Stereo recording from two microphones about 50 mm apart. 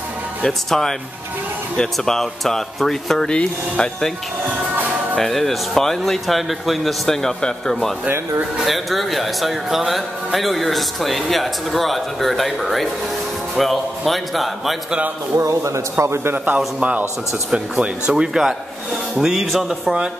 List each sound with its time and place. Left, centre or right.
0.4 s speech: centre
3.3 s speech: centre
5.1 s a man's voice: centre
8.6 s a man's voice: centre
15.3 s a man's voice: right
16.5 s a man's voice: right
17.5 s speech: centre